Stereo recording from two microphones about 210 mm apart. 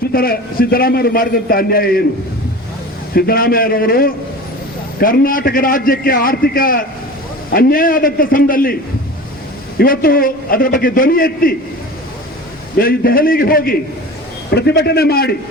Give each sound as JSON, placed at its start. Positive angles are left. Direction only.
{"t": 0.1, "sound": "a man's voice", "side_deg": 45}
{"t": 3.2, "sound": "a man's voice", "side_deg": 45}
{"t": 12.7, "sound": "a man's voice", "side_deg": 45}